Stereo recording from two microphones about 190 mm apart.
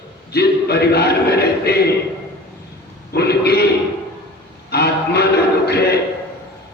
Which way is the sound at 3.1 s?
55° left (ahead or behind).